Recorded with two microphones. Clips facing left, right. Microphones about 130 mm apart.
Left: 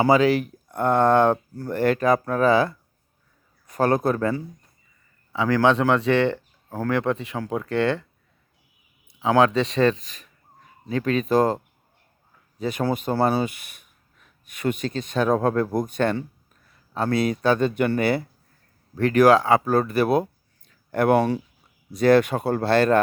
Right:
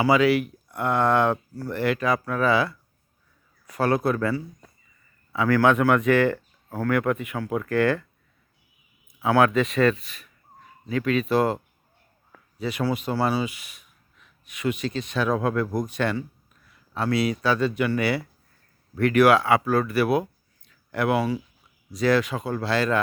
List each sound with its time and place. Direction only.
0.0 s speech: 40° left (ahead or behind)
5.3 s speech: 20° left (ahead or behind)
9.1 s speech: 20° left (ahead or behind)
9.5 s speech: 35° left (ahead or behind)
18.9 s speech: 35° left (ahead or behind)
20.7 s a sound: 45° left (ahead or behind)
21.9 s speech: 55° left (ahead or behind)